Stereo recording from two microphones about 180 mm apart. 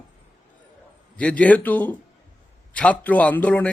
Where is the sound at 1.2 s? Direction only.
10° left (ahead or behind).